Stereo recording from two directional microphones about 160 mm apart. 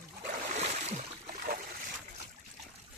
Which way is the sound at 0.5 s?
45° right (ahead or behind).